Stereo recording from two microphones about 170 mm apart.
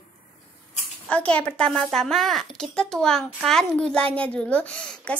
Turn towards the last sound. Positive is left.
turn(degrees=5)  # may be behind; listen again after turning